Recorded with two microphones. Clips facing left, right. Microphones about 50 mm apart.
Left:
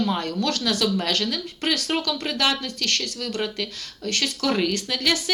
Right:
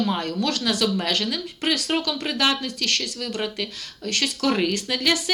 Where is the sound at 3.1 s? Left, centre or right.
Centre.